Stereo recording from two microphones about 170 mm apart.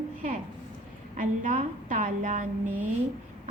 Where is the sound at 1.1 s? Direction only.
50° right (ahead or behind).